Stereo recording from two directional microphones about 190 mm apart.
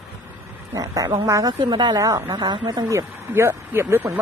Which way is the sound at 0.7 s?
20° right (ahead or behind).